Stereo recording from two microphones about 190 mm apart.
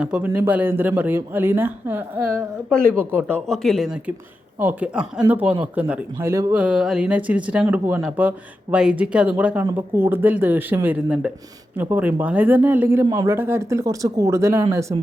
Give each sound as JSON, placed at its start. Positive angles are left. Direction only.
{"t": 0.0, "sound": "speech", "side_deg": -5}
{"t": 3.3, "sound": "speech", "side_deg": 0}